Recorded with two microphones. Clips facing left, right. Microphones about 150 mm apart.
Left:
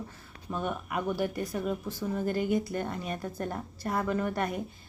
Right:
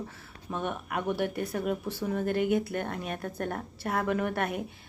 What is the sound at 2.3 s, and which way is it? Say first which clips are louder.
Speech: right 2 dB; 65° right (ahead or behind).